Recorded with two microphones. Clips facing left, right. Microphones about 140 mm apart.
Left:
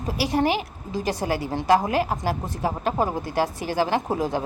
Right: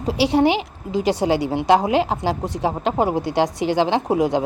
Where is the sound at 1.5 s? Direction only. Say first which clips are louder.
Right 1 dB; 20° right (ahead or behind).